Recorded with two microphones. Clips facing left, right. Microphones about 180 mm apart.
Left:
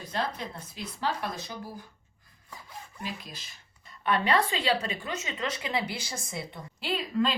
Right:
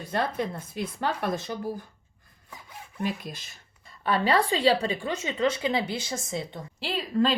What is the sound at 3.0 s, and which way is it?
Speech, 50° right (ahead or behind).